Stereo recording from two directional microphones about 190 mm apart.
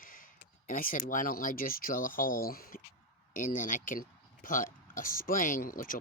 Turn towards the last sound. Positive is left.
turn(degrees=45)  # may be behind; listen again after turning